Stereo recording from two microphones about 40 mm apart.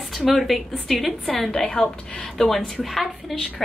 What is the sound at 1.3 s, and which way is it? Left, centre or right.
A woman's voice, centre.